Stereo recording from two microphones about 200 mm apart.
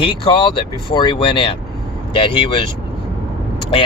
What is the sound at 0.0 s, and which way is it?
Speech, 25° left (ahead or behind).